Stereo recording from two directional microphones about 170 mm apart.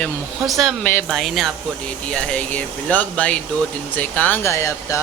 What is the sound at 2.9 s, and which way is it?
Speech, 10° left (ahead or behind).